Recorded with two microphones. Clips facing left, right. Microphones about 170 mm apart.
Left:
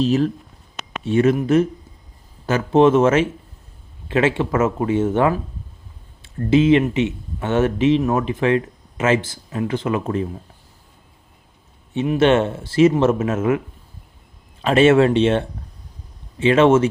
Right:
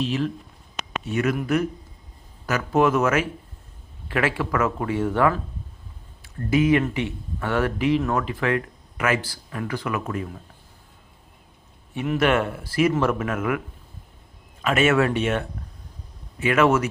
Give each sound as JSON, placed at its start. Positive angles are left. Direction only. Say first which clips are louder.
{"t": 0.0, "sound": "speech", "louder": "left 7 dB", "side_deg": 40}
{"t": 1.0, "sound": "speech", "louder": "left 8 dB", "side_deg": 25}
{"t": 11.9, "sound": "speech", "louder": "left 5 dB", "side_deg": 25}
{"t": 14.6, "sound": "speech", "louder": "left 6 dB", "side_deg": 30}